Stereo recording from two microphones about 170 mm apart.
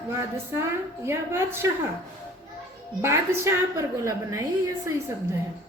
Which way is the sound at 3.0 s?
15° right (ahead or behind).